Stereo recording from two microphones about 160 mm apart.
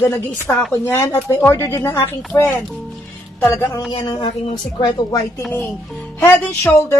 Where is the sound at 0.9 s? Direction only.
20° left (ahead or behind).